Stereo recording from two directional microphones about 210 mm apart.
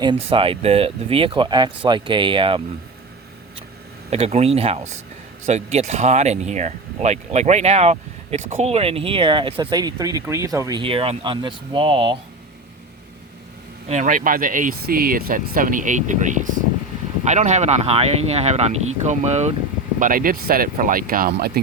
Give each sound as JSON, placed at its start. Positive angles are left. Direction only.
{"t": 0.0, "sound": "speech", "side_deg": -25}
{"t": 4.1, "sound": "speech", "side_deg": -30}
{"t": 13.8, "sound": "speech", "side_deg": -35}